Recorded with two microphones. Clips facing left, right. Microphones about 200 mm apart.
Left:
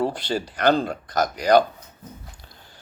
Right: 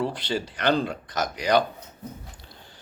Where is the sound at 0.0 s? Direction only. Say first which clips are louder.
Left 3 dB; 45° left (ahead or behind).